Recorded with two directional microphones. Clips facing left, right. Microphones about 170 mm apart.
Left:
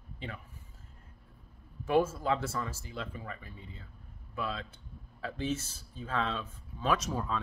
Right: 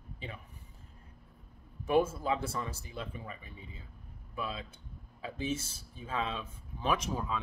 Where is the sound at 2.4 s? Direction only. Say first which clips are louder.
Left 1 dB; 25° right (ahead or behind).